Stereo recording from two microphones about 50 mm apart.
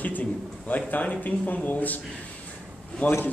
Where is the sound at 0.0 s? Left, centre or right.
Left.